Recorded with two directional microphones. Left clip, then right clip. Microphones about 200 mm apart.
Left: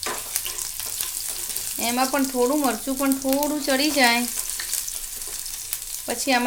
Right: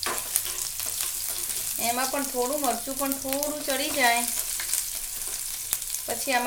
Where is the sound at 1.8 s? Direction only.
45° left (ahead or behind).